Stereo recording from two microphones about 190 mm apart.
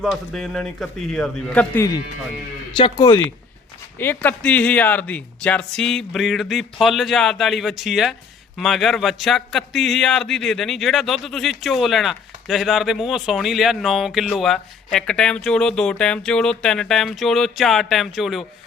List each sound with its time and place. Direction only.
0.0 s a man's voice: centre (ahead or behind)
2.7 s speech: 25° left (ahead or behind)
3.9 s a man's voice: 10° left (ahead or behind)